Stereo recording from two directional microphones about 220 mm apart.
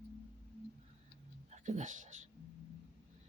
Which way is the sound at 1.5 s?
30° right (ahead or behind).